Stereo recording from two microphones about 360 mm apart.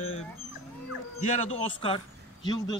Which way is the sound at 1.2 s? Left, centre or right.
Centre.